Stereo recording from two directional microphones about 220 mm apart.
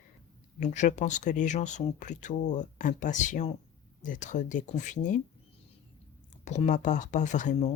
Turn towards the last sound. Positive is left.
turn(degrees=30)  # may be behind; listen again after turning